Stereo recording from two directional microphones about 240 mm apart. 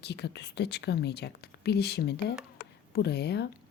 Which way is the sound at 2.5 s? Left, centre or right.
Left.